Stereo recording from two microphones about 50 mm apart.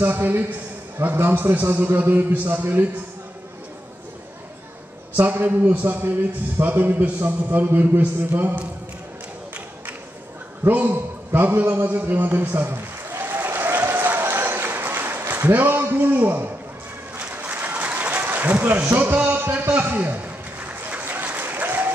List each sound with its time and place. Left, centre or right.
0.0 s a man's voice: right
5.1 s a man's voice: right
10.7 s a man's voice: right
12.6 s a sound: right
13.9 s applause: right
16.3 s a man's voice: right
17.2 s a sound: right
17.6 s applause: right
19.1 s music: right
19.9 s a sound: right
21.0 s applause: right